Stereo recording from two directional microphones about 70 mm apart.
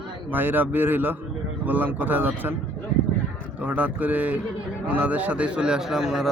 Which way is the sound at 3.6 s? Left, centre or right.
Right.